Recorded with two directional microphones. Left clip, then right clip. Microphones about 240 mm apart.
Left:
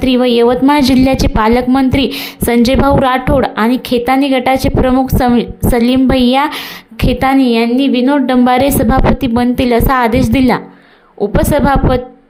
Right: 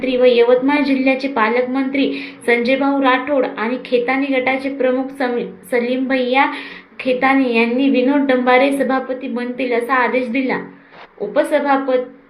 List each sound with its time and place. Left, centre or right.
0.0 s a woman's voice: left